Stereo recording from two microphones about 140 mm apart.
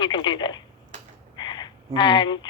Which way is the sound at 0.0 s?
35° left (ahead or behind).